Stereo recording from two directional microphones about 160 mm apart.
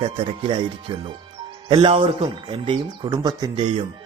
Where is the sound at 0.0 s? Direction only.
30° right (ahead or behind).